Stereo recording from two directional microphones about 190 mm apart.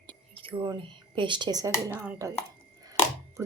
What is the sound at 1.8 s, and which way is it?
Speech, 15° right (ahead or behind).